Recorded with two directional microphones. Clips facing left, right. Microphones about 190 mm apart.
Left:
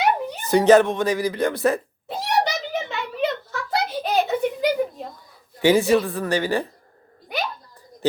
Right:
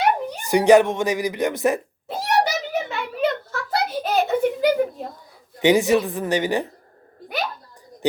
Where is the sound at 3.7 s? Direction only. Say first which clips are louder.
Right 1 dB; centre (ahead or behind).